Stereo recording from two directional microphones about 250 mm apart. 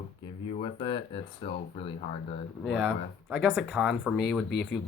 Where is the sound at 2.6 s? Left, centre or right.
Centre.